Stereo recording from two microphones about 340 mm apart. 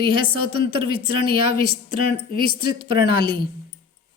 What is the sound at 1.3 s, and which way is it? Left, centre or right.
Speech, right.